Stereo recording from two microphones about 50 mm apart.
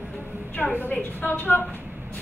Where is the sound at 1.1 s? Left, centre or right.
Left.